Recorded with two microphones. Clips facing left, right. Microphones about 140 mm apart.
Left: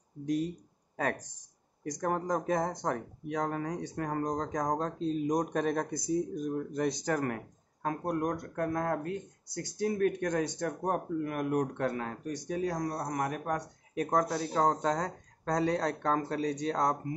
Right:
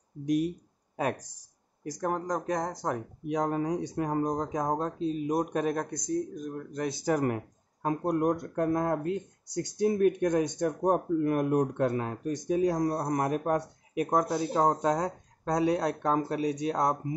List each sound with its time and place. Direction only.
0.2 s speech: 15° right (ahead or behind)
3.3 s speech: 20° right (ahead or behind)
7.2 s speech: 20° right (ahead or behind)
13.9 s speech: 10° right (ahead or behind)